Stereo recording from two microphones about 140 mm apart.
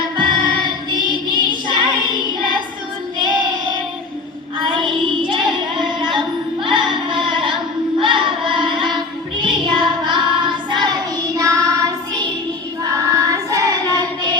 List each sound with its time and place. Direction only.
0.2 s music: 35° right (ahead or behind)
1.3 s child singing: 35° right (ahead or behind)
4.6 s child singing: 35° right (ahead or behind)
5.2 s music: 35° right (ahead or behind)
8.0 s carnatic music: 35° right (ahead or behind)
9.4 s child singing: 35° right (ahead or behind)